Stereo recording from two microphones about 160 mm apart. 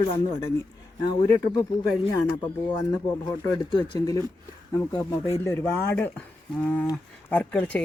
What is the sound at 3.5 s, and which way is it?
Speech, 30° left (ahead or behind).